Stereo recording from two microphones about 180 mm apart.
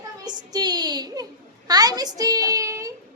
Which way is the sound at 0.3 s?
25° right (ahead or behind).